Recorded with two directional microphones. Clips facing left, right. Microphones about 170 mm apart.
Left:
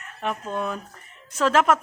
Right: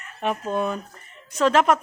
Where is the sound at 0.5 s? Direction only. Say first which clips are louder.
Right 3 dB; centre (ahead or behind).